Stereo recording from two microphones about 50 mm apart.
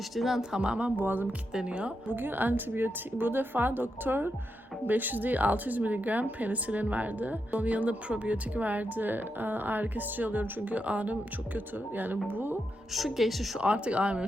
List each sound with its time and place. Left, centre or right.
0.2 s a woman's voice: centre
0.5 s speech: right
0.9 s speech: right
1.5 s speech: right
2.1 s speech: right
12.9 s a woman's voice: centre
13.6 s speech: right